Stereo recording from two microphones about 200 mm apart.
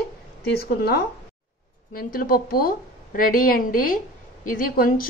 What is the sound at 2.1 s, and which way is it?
A woman's voice, 45° left (ahead or behind).